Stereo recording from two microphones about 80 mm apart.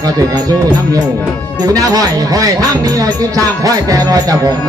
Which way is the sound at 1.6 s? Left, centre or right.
Right.